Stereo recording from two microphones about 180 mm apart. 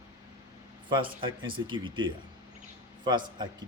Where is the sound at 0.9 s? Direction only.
25° right (ahead or behind).